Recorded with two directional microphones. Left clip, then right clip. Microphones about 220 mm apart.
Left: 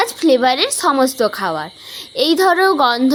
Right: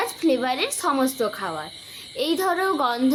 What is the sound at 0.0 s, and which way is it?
A woman's voice, 40° left (ahead or behind).